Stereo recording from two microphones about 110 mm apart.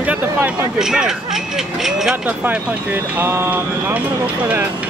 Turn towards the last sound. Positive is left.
turn(degrees=-20)  # may be behind; listen again after turning